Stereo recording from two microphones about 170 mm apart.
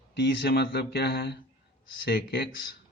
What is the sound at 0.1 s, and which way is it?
Speech, 80° left.